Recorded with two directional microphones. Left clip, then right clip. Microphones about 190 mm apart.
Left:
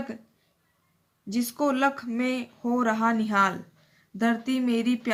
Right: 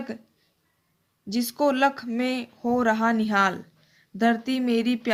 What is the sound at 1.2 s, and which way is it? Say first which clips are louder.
Speech: right 3 dB; 30° right (ahead or behind).